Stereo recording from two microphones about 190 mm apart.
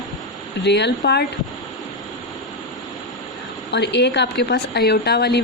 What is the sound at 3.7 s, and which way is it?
A woman's voice, 65° left (ahead or behind).